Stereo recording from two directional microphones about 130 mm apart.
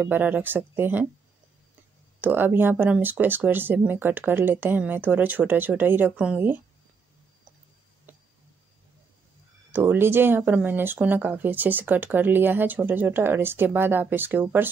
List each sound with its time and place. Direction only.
0.0 s speech: 15° right (ahead or behind)
2.1 s speech: 15° right (ahead or behind)
9.7 s speech: 15° right (ahead or behind)